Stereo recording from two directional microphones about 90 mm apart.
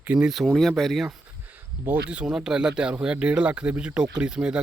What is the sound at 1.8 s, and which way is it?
Speech, 15° right (ahead or behind).